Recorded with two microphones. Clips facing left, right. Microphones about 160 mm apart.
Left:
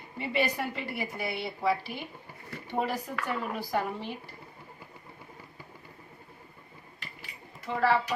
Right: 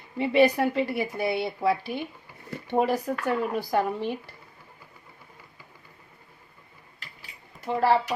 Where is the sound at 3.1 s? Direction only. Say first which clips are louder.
Right 7 dB; 50° right (ahead or behind).